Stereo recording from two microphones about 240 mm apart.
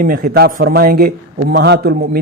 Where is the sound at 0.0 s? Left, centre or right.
Right.